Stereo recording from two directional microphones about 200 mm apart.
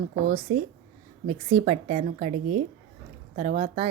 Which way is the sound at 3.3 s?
35° right (ahead or behind).